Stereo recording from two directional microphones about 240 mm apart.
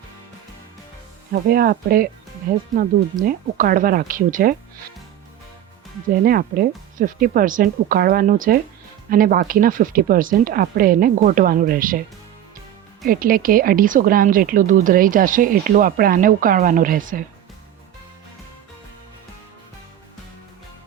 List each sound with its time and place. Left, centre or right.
1.3 s speech: right
6.2 s speech: right
13.1 s speech: right